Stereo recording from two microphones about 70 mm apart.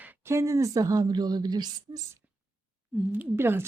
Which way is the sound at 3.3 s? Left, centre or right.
Right.